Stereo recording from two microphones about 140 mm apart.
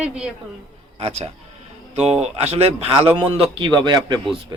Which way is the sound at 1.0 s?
50° right (ahead or behind).